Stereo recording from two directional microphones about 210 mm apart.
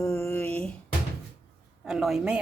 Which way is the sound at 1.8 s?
Centre (ahead or behind).